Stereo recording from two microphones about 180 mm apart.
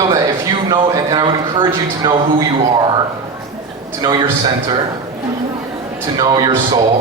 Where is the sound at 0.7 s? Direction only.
25° right (ahead or behind).